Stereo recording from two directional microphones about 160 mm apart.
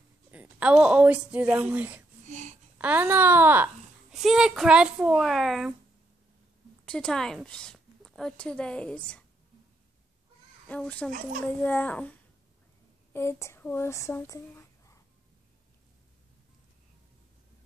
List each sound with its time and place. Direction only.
0.3 s a woman's voice: 10° right (ahead or behind)
2.2 s babbling: 50° right (ahead or behind)
2.8 s a woman's voice: 10° right (ahead or behind)
4.1 s speech: centre (ahead or behind)
6.9 s a woman's voice: 5° left (ahead or behind)
10.7 s a child's voice: 10° left (ahead or behind)
13.1 s speech: 15° left (ahead or behind)